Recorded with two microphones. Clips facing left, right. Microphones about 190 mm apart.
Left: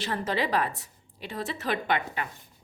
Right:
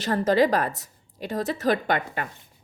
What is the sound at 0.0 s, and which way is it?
A woman's voice, 40° right (ahead or behind).